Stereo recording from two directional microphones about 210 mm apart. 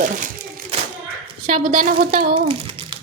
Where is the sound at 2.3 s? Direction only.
25° right (ahead or behind).